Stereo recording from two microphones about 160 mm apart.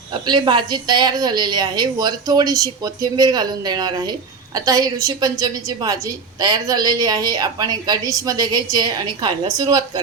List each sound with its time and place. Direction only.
0.1 s a woman's voice: 30° right (ahead or behind)